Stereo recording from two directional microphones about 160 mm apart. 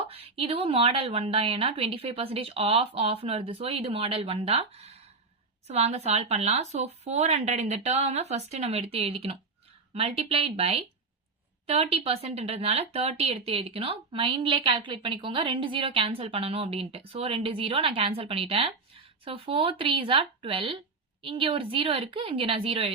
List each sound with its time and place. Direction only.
0.0 s speech: 40° right (ahead or behind)